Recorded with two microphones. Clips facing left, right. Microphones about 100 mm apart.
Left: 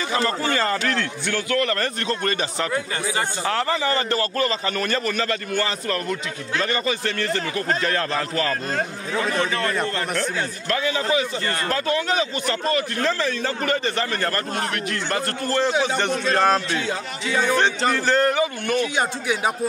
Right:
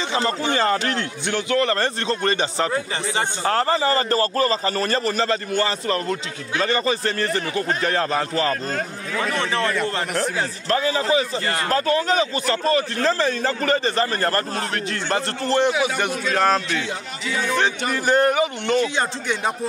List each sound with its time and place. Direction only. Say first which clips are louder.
0.1 s a man's voice: even; 20° right (ahead or behind)
8.7 s a man's voice: left 1 dB; 30° left (ahead or behind)
9.4 s a man's voice: right 1 dB; 30° right (ahead or behind)
15.0 s a man's voice: right 4 dB; 25° right (ahead or behind)
16.0 s a man's voice: left 1 dB; 5° right (ahead or behind)
17.9 s a man's voice: right 5 dB; 15° right (ahead or behind)
18.9 s speech: left 1 dB; 10° left (ahead or behind)